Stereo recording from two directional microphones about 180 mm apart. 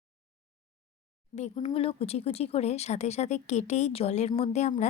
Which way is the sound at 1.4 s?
35° left (ahead or behind).